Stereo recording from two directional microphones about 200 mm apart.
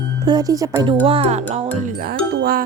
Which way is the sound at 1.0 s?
30° right (ahead or behind).